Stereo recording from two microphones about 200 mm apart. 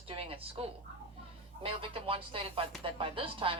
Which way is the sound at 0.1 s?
30° right (ahead or behind).